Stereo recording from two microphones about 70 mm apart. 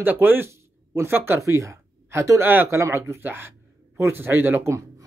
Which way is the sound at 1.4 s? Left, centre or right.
Right.